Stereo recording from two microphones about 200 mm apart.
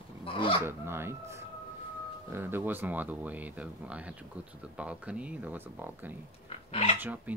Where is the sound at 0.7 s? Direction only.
10° right (ahead or behind).